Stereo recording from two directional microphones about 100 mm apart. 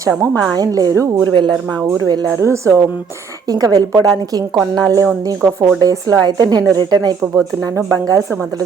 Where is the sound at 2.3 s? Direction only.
30° right (ahead or behind); by 7.2 s 45° right (ahead or behind).